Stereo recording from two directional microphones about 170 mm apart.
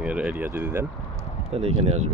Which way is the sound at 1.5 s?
35° right (ahead or behind).